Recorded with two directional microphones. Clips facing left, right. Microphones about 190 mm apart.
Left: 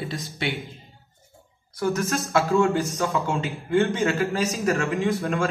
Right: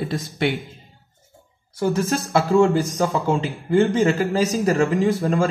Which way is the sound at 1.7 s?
30° right (ahead or behind).